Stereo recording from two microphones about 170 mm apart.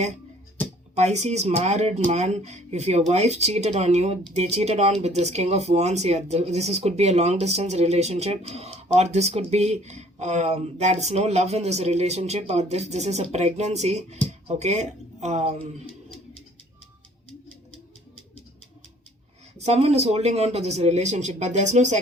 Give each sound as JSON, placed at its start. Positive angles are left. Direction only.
{"t": 0.9, "sound": "speech", "side_deg": -40}
{"t": 19.5, "sound": "speech", "side_deg": -40}